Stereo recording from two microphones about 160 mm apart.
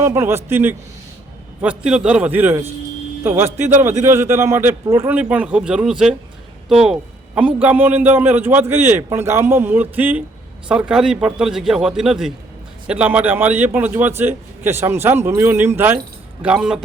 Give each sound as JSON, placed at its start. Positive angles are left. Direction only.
{"t": 0.0, "sound": "a man's voice", "side_deg": -15}